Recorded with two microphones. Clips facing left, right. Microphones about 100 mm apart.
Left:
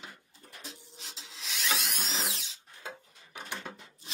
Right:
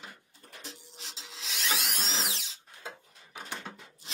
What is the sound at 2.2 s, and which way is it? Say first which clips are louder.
Drill: right 1 dB; 90° right.